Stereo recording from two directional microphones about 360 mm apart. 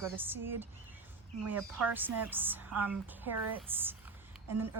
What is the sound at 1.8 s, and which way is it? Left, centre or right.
A woman's voice, centre.